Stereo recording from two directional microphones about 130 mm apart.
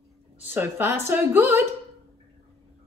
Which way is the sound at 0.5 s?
15° right (ahead or behind).